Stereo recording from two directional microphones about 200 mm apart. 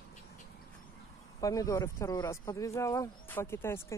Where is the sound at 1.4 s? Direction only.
15° left (ahead or behind).